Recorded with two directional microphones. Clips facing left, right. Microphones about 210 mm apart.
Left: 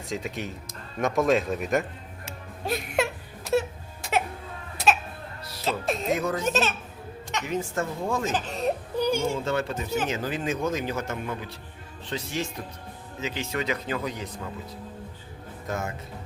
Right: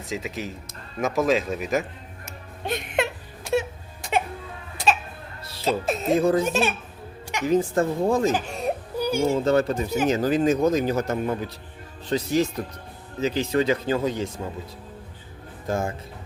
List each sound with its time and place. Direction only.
0.1 s speech: centre (ahead or behind)
2.6 s whimper: centre (ahead or behind)
5.6 s speech: centre (ahead or behind)
6.1 s speech: 30° right (ahead or behind)
6.4 s speech: 10° right (ahead or behind)
7.4 s speech: 35° right (ahead or behind)
8.3 s baby cry: 10° right (ahead or behind)
9.3 s speech: 40° right (ahead or behind)
15.6 s speech: 30° right (ahead or behind)